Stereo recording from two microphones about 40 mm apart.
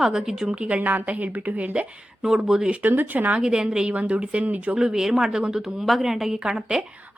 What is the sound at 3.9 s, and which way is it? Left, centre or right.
Speech, right.